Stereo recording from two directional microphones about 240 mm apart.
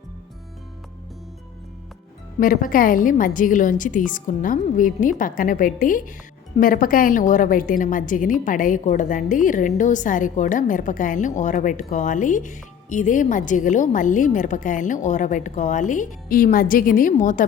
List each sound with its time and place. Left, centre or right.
2.4 s a woman's voice: left